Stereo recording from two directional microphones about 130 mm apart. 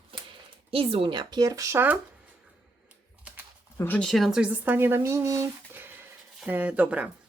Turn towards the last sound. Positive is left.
turn(degrees=-10)  # may be behind; listen again after turning